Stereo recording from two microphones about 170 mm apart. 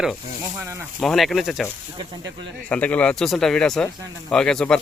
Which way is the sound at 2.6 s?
10° left (ahead or behind).